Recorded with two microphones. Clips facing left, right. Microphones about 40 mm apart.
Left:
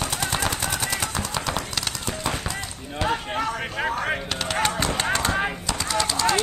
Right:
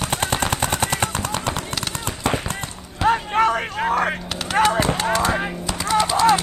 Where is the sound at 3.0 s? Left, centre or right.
Right.